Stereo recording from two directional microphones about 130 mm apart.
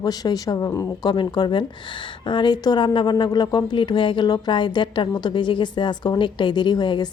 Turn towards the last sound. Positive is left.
turn(degrees=35)  # may be behind; listen again after turning